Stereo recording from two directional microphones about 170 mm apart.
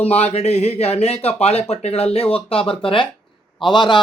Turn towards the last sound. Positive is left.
turn(degrees=30)  # may be behind; listen again after turning